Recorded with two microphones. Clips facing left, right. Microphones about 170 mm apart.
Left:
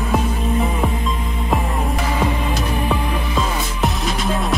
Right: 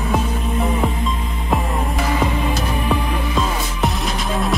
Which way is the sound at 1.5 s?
Centre (ahead or behind).